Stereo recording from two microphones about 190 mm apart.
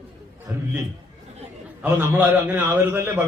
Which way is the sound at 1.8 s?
10° right (ahead or behind).